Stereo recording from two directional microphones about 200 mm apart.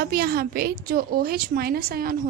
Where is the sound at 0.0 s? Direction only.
50° right (ahead or behind).